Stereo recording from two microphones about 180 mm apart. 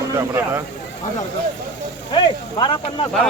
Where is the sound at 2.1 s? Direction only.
25° left (ahead or behind).